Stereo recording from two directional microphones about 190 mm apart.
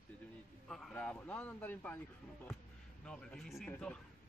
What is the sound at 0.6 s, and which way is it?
Speech, 5° left (ahead or behind).